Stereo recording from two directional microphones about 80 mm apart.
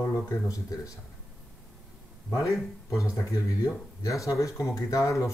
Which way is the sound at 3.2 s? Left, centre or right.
Left.